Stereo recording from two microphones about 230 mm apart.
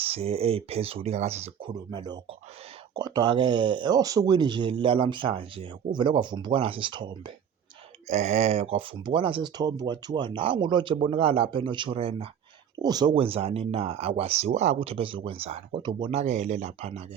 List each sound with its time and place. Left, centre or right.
0.0 s speech: right